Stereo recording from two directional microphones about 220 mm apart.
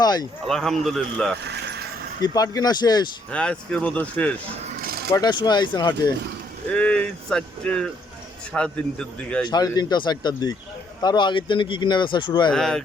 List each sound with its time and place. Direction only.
0.0 s speech: 20° left (ahead or behind)
0.4 s speech: centre (ahead or behind)
2.2 s speech: 15° left (ahead or behind)
3.3 s speech: 5° left (ahead or behind)
4.8 s a sound: 45° right (ahead or behind)
5.1 s speech: 20° left (ahead or behind)
6.7 s speech: 5° left (ahead or behind)
9.5 s speech: 20° left (ahead or behind)
12.5 s speech: centre (ahead or behind)